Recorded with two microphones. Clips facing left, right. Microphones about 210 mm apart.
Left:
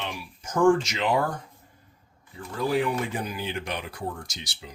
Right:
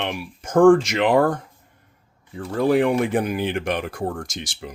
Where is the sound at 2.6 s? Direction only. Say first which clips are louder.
Right 7 dB; 65° right (ahead or behind).